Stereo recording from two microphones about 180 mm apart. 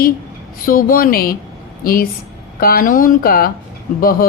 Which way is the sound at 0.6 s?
50° left (ahead or behind).